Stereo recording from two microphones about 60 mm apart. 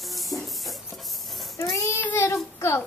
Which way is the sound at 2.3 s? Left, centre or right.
Left.